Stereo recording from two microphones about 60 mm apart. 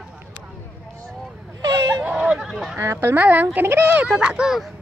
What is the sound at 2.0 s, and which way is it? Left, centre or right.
Speech, centre.